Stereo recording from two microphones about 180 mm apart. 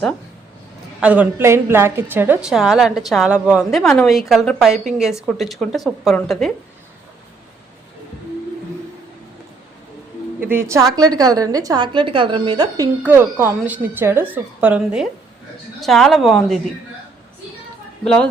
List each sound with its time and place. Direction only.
1.0 s a woman's voice: 10° right (ahead or behind)
10.4 s a woman's voice: 15° right (ahead or behind)
13.0 s a woman's voice: 10° right (ahead or behind)
18.0 s a woman's voice: 5° left (ahead or behind)